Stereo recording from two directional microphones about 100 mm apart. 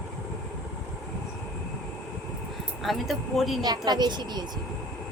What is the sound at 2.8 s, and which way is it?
Speech, centre (ahead or behind).